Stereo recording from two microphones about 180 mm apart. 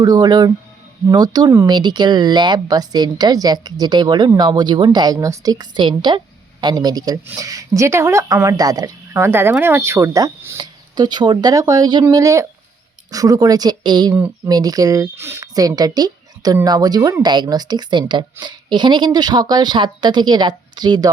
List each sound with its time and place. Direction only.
0.0 s speech: 25° right (ahead or behind)